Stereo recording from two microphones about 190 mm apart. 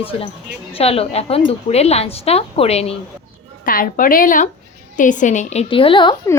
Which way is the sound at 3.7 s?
45° left (ahead or behind).